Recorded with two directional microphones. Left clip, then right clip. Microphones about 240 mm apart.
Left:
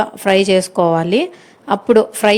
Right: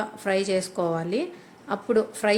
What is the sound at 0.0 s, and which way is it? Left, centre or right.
A woman's voice, left.